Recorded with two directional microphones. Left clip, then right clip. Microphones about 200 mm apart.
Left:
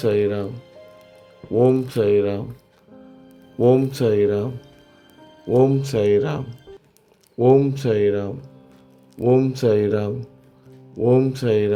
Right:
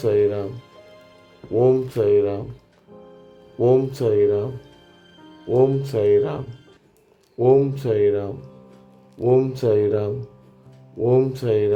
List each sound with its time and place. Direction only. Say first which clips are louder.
0.0 s speech: right 1 dB; 15° left (ahead or behind)
1.5 s speech: even; 15° left (ahead or behind)
3.6 s speech: left 1 dB; 15° left (ahead or behind)
5.5 s speech: left 1 dB; 15° left (ahead or behind)